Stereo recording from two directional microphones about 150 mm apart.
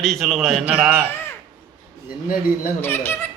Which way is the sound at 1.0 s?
15° left (ahead or behind).